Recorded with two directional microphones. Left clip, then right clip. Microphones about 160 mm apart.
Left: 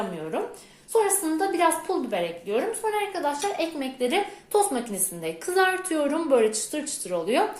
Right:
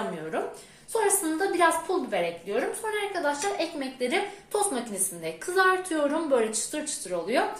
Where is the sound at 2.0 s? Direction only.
35° left (ahead or behind).